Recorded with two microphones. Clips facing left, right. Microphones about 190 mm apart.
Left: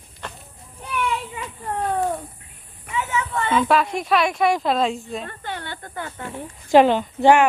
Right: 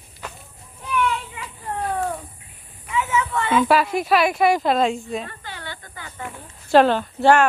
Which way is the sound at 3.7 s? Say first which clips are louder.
Right 1 dB; 5° right (ahead or behind).